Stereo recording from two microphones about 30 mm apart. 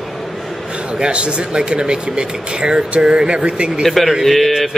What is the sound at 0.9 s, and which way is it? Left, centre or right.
Speech, right.